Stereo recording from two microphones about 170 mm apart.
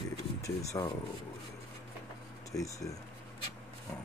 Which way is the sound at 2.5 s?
20° left (ahead or behind).